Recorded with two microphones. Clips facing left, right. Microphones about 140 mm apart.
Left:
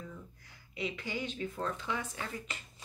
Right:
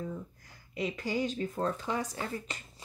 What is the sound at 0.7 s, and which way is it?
Speech, 40° right (ahead or behind).